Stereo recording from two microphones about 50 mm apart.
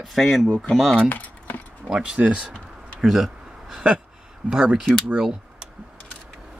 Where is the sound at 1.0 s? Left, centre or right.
Left.